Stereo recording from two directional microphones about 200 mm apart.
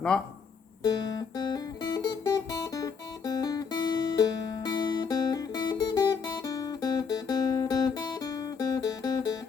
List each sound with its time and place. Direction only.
0.8 s music: 20° left (ahead or behind)